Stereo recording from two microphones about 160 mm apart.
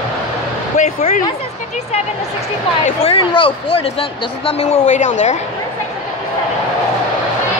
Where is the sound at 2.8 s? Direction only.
35° left (ahead or behind).